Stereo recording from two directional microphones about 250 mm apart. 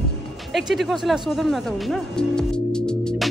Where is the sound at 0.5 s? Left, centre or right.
Centre.